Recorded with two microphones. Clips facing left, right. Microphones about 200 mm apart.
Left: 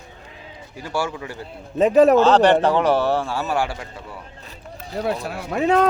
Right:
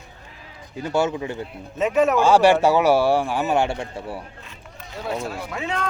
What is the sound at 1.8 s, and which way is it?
Speech, 35° left (ahead or behind).